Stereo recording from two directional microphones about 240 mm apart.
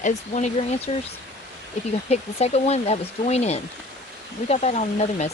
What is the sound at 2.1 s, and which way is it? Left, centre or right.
Speech, left.